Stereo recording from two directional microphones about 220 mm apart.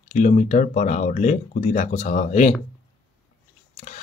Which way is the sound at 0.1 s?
35° left (ahead or behind).